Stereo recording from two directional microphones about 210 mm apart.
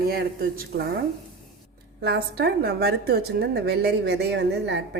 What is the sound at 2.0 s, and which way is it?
A woman's voice, 50° right (ahead or behind).